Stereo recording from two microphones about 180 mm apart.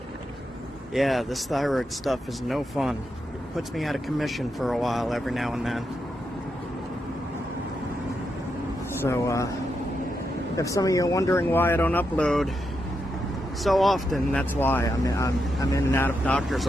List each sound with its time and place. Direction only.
0.9 s speech: centre (ahead or behind)
9.0 s speech: 15° left (ahead or behind)
10.6 s speech: 20° left (ahead or behind)
13.7 s speech: centre (ahead or behind)